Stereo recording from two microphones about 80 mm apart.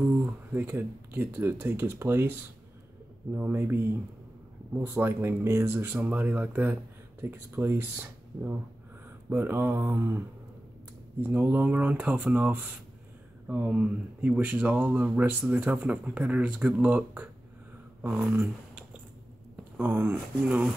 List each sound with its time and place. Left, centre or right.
0.5 s speech: right
3.3 s speech: right
19.8 s speech: right